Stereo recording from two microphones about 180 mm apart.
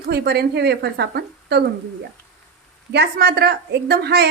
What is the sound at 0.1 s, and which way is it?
A woman's voice, 65° right (ahead or behind).